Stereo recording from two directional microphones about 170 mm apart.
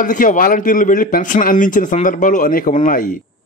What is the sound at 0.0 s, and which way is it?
Speech, 50° left (ahead or behind).